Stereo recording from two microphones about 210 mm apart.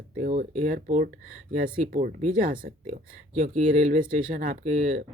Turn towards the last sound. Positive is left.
turn(degrees=-35)  # may be behind; listen again after turning